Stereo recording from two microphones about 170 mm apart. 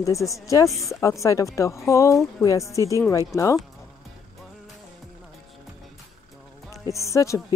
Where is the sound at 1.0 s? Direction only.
20° left (ahead or behind).